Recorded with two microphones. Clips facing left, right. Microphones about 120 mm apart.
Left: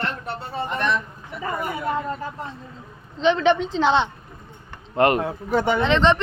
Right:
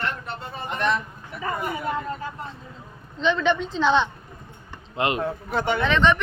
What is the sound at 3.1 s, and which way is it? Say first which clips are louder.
Speech: left 4 dB; 30° left (ahead or behind).